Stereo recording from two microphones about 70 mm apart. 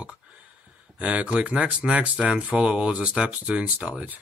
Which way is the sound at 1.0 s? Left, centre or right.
Centre.